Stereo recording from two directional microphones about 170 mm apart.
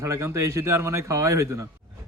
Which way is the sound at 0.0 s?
15° right (ahead or behind).